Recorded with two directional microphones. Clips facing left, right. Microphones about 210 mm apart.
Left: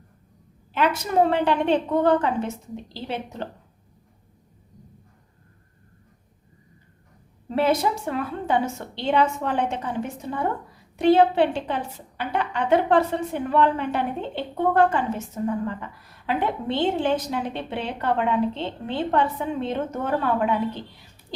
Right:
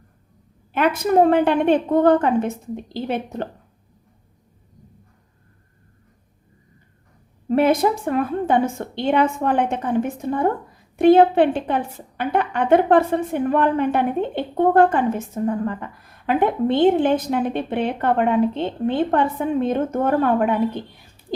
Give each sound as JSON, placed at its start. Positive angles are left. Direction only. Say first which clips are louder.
{"t": 0.7, "sound": "a woman's voice", "louder": "right 5 dB", "side_deg": -55}
{"t": 7.4, "sound": "a woman's voice", "louder": "right 5 dB", "side_deg": -50}